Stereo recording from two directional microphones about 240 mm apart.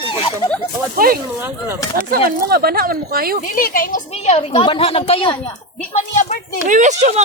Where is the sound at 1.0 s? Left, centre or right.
Right.